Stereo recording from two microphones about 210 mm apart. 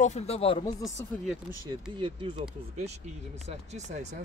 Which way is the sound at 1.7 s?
25° right (ahead or behind).